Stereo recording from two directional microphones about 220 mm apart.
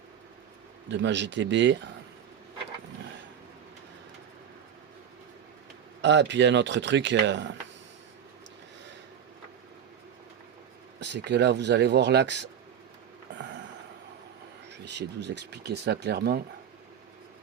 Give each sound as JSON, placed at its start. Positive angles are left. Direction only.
{"t": 0.9, "sound": "speech", "side_deg": -55}
{"t": 6.0, "sound": "speech", "side_deg": -55}
{"t": 11.0, "sound": "speech", "side_deg": -50}
{"t": 13.3, "sound": "a sound", "side_deg": -55}
{"t": 14.7, "sound": "speech", "side_deg": -50}